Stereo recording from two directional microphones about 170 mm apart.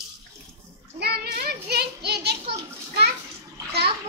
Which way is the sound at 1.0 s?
70° right (ahead or behind).